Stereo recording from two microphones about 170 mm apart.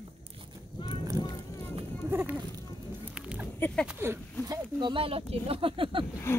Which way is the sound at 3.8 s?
15° right (ahead or behind).